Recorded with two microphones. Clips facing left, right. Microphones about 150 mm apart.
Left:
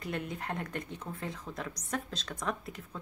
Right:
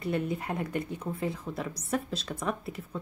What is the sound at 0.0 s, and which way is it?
A woman's voice, 5° right (ahead or behind).